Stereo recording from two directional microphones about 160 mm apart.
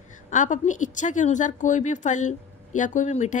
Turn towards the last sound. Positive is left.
turn(degrees=50)  # may be behind; listen again after turning